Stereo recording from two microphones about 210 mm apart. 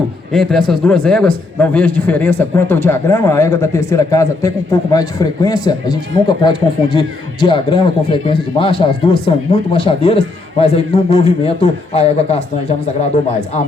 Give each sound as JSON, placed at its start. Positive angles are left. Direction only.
{"t": 0.3, "sound": "a man's voice", "side_deg": 0}